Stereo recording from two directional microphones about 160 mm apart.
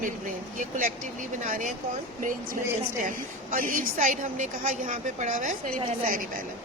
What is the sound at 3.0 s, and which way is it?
A woman's voice, 55° right (ahead or behind).